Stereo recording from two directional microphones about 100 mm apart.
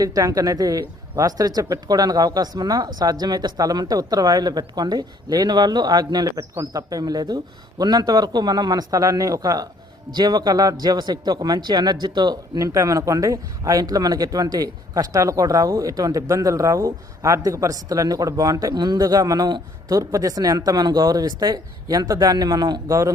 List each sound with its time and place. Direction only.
0.0 s speech: 40° right (ahead or behind)
10.1 s speech: 45° right (ahead or behind)
12.5 s speech: 35° right (ahead or behind)
20.0 s speech: 35° right (ahead or behind)